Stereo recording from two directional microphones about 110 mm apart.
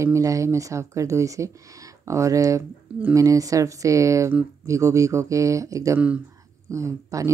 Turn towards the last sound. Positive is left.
turn(degrees=-30)  # may be behind; listen again after turning